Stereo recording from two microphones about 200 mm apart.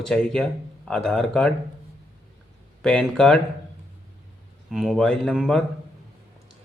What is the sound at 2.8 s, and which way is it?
Speech, 5° left (ahead or behind).